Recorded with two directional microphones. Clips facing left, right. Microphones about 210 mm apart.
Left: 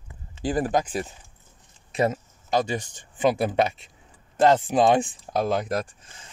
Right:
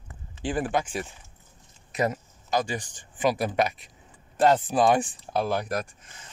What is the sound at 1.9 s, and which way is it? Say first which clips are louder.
Speech: left 3 dB; 25° left (ahead or behind).